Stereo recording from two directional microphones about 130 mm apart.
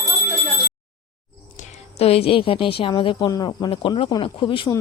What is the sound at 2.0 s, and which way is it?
A woman's voice, 50° left (ahead or behind).